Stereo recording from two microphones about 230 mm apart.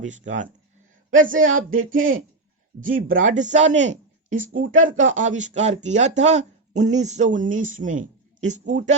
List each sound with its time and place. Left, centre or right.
0.0 s speech: right